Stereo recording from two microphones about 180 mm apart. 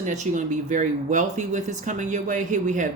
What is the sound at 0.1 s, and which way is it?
Speech, 45° right (ahead or behind).